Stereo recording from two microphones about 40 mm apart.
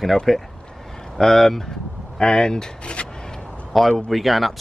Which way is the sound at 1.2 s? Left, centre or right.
Centre.